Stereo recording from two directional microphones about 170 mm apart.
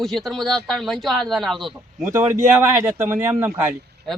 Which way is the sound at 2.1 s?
15° right (ahead or behind).